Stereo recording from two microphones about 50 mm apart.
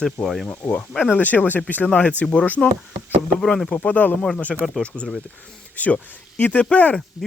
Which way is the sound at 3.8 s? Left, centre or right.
Left.